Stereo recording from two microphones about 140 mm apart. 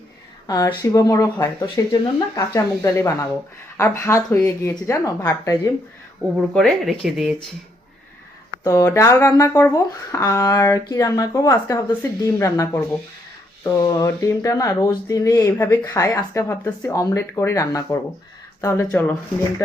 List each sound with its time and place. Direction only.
0.4 s speech: 25° left (ahead or behind)
6.3 s speech: centre (ahead or behind)
8.6 s speech: 20° left (ahead or behind)
18.9 s speech: 10° left (ahead or behind)